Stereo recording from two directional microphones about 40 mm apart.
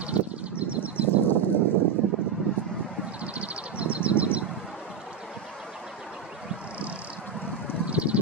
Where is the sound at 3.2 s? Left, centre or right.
Right.